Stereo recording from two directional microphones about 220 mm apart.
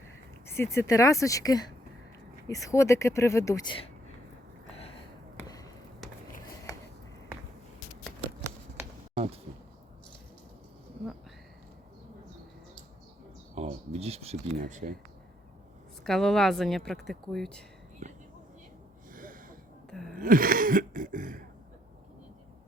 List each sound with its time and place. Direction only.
0.4 s speech: 10° left (ahead or behind)
2.6 s speech: 15° left (ahead or behind)
5.4 s basketball bounce: 15° left (ahead or behind)
9.1 s a sound: 25° right (ahead or behind)
13.6 s speech: 30° right (ahead or behind)
16.0 s speech: centre (ahead or behind)
18.0 s a sound: 35° right (ahead or behind)
19.9 s gasp: centre (ahead or behind)
20.1 s a sound: 40° right (ahead or behind)